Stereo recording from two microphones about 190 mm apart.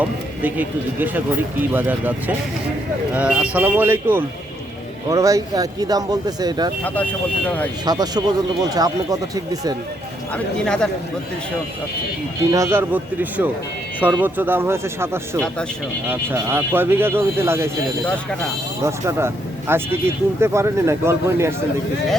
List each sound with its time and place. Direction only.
0.0 s speech: 10° right (ahead or behind)
6.8 s speech: 10° left (ahead or behind)
7.9 s speech: 20° right (ahead or behind)
10.3 s speech: 5° left (ahead or behind)
12.5 s speech: 15° right (ahead or behind)
18.8 s speech: 15° right (ahead or behind)